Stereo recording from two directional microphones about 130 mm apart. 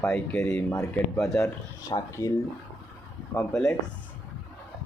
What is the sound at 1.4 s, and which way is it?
Speech, 25° left (ahead or behind).